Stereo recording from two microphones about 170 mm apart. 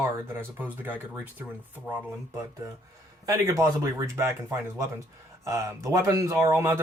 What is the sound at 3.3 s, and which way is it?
Speech, 20° right (ahead or behind).